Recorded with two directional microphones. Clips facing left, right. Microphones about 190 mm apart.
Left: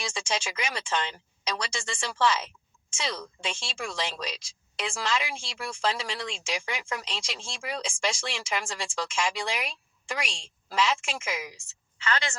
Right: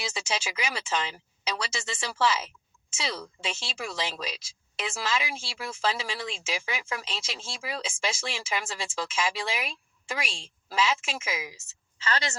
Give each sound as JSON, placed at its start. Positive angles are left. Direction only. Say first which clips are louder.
{"t": 0.0, "sound": "speech", "louder": "left 1 dB", "side_deg": -5}
{"t": 12.0, "sound": "a woman's voice", "louder": "even", "side_deg": -35}